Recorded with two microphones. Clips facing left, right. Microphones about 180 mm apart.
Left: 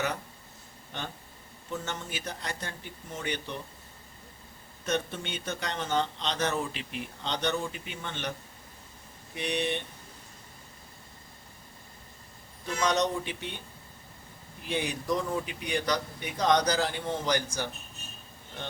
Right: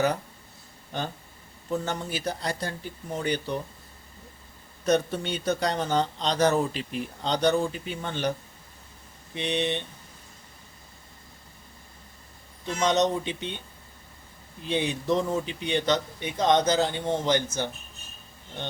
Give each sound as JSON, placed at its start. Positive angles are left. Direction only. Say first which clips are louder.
{"t": 1.7, "sound": "speech", "louder": "right 7 dB", "side_deg": -35}
{"t": 4.9, "sound": "speech", "louder": "right 7 dB", "side_deg": -40}
{"t": 9.3, "sound": "a man's voice", "louder": "right 3 dB", "side_deg": -25}
{"t": 12.6, "sound": "a man's voice", "louder": "right 4 dB", "side_deg": -20}
{"t": 14.6, "sound": "a man's voice", "louder": "right 4 dB", "side_deg": -25}